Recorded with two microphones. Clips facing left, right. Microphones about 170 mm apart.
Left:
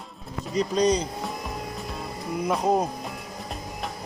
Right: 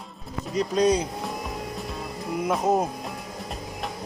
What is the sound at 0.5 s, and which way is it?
Speech, centre (ahead or behind).